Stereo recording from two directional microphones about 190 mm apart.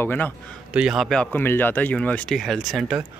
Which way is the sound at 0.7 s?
5° right (ahead or behind).